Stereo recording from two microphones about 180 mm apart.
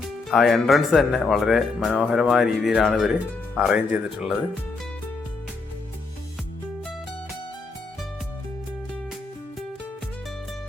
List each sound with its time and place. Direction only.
0.0 s speech: centre (ahead or behind)